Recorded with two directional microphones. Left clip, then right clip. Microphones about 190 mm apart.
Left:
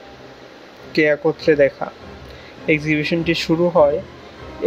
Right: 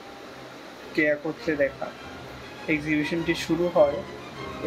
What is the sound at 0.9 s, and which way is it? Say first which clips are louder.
Speech: left 8 dB; 50° left (ahead or behind).